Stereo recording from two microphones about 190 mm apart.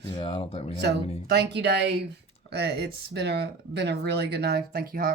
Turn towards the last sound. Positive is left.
turn(degrees=-50)  # may be behind; listen again after turning